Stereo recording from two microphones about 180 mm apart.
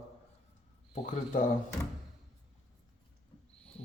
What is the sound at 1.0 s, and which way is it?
Speech, 45° left (ahead or behind).